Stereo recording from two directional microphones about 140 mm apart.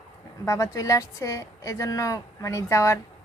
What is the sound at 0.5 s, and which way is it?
A woman's voice, 25° left (ahead or behind).